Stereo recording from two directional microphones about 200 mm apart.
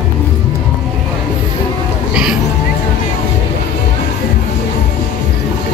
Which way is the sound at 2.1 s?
5° right (ahead or behind).